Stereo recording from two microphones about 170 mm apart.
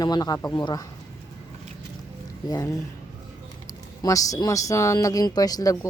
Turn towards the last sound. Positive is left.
turn(degrees=20)  # may be behind; listen again after turning